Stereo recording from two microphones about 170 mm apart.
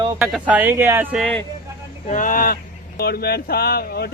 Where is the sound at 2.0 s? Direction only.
50° left (ahead or behind).